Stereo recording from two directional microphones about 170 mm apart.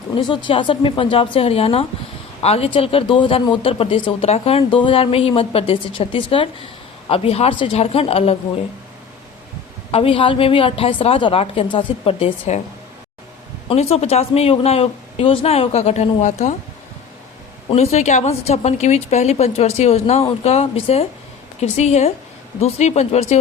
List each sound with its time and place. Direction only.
0.2 s a man's voice: 30° left (ahead or behind)
9.9 s a man's voice: 35° left (ahead or behind)
13.7 s a man's voice: 35° left (ahead or behind)
17.7 s a man's voice: 40° left (ahead or behind)